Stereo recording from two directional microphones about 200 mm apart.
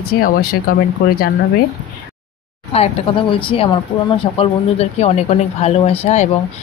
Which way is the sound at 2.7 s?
30° left (ahead or behind).